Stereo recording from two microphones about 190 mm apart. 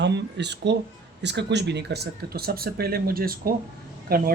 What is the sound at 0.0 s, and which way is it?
Speech, 65° right (ahead or behind).